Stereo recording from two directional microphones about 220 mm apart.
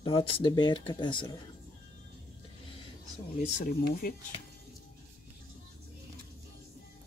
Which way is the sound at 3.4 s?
35° left (ahead or behind).